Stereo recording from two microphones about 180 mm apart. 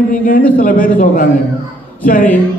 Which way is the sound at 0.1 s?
50° left (ahead or behind).